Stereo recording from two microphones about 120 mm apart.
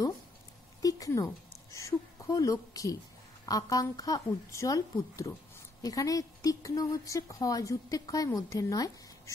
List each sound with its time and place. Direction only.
0.8 s a woman's voice: 30° left (ahead or behind)